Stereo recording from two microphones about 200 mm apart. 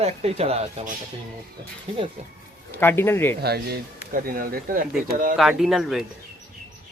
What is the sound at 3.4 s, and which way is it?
Speech, 50° right (ahead or behind).